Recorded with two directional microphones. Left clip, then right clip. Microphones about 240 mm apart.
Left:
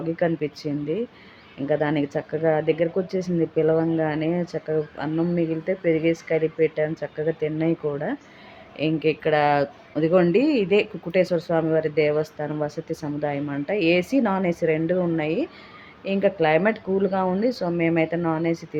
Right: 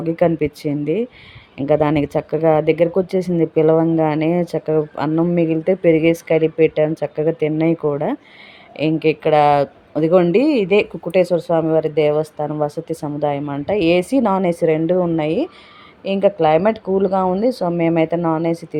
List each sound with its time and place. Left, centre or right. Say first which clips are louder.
0.0 s speech: right 7 dB; right